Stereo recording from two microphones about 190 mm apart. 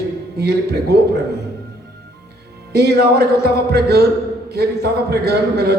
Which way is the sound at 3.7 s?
55° right (ahead or behind).